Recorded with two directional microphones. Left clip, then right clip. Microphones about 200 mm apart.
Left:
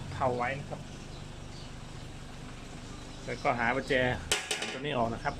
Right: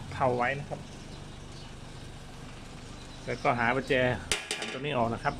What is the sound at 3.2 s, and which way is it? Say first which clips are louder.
Speech: right 2 dB; 30° right (ahead or behind).